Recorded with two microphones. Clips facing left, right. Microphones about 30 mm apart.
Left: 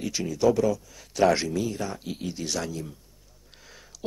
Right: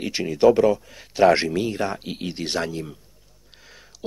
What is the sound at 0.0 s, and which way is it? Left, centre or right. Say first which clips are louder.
Speech: right 6 dB; right.